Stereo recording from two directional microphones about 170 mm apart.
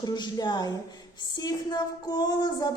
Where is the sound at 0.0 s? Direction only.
25° left (ahead or behind).